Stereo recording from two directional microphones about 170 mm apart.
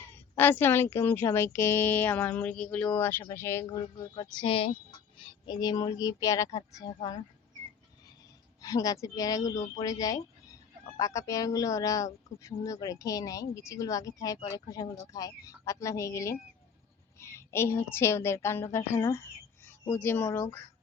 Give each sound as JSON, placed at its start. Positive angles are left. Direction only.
{"t": 0.3, "sound": "speech", "side_deg": 10}
{"t": 8.6, "sound": "speech", "side_deg": 20}